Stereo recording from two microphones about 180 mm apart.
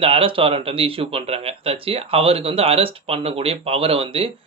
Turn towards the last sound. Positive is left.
turn(degrees=-30)  # may be behind; listen again after turning